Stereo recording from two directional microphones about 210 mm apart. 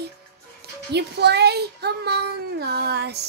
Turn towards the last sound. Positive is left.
turn(degrees=-50)  # may be behind; listen again after turning